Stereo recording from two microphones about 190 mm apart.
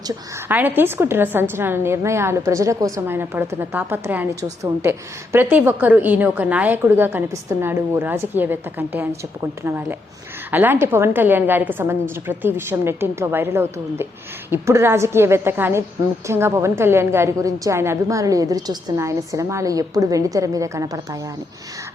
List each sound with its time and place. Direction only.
0.4 s a woman's voice: 10° right (ahead or behind)
10.5 s a woman's voice: 10° right (ahead or behind)